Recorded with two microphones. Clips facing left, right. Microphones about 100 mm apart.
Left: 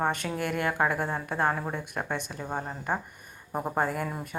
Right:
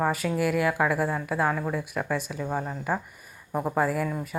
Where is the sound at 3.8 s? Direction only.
Centre (ahead or behind).